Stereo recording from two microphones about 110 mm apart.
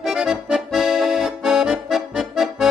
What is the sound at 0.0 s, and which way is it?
Accordion, 5° right (ahead or behind).